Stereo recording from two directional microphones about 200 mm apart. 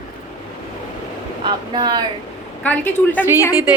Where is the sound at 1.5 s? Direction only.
20° right (ahead or behind).